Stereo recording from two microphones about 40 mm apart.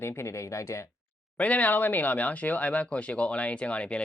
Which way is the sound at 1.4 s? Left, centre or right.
Left.